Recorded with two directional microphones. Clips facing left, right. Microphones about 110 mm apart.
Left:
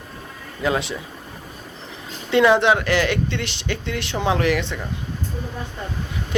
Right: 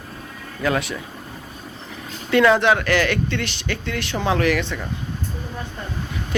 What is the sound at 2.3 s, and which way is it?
Speech, 20° left (ahead or behind).